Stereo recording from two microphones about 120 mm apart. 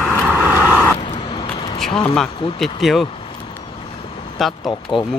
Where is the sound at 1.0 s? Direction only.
40° left (ahead or behind).